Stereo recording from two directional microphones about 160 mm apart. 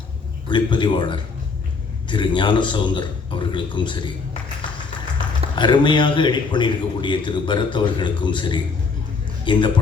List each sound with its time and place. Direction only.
0.4 s a man's voice: 30° left (ahead or behind)
5.5 s a man's voice: 30° left (ahead or behind)